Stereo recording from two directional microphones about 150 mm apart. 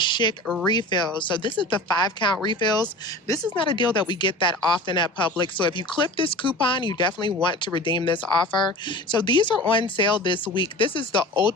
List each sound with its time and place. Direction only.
0.0 s a sound: 30° left (ahead or behind)
0.7 s speech: 30° left (ahead or behind)
3.6 s speech: 35° left (ahead or behind)